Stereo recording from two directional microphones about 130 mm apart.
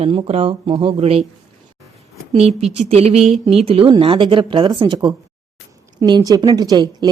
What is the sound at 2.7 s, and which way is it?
Speech, 55° right (ahead or behind).